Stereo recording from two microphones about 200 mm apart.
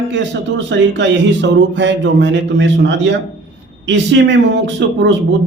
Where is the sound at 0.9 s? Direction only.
60° right (ahead or behind).